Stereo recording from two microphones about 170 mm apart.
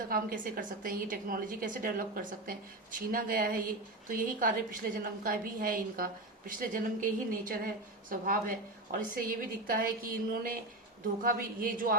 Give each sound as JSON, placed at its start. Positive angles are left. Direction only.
{"t": 0.1, "sound": "a woman's voice", "side_deg": -55}